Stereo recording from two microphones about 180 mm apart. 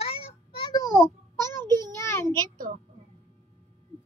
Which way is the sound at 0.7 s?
15° left (ahead or behind).